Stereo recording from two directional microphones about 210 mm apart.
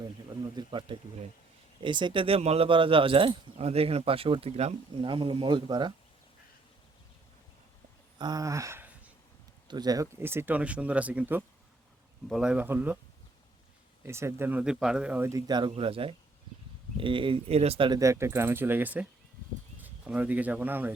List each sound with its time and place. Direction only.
0.0 s speech: 20° right (ahead or behind)
8.2 s a sound: 15° right (ahead or behind)
9.6 s speech: 20° right (ahead or behind)
14.0 s speech: 10° right (ahead or behind)